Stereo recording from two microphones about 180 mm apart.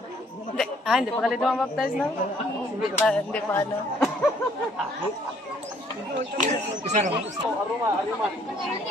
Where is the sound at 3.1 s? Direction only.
5° left (ahead or behind).